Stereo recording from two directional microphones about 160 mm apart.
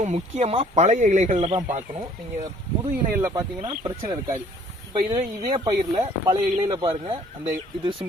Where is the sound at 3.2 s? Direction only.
15° right (ahead or behind).